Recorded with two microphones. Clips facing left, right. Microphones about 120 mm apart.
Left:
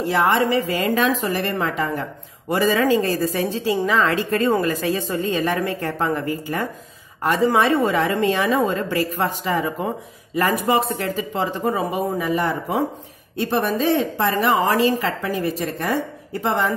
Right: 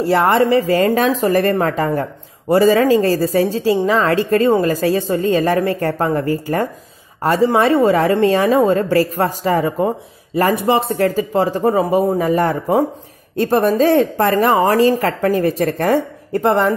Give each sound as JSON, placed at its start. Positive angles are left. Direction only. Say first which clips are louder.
{"t": 0.0, "sound": "a woman's voice", "louder": "right 5 dB", "side_deg": -40}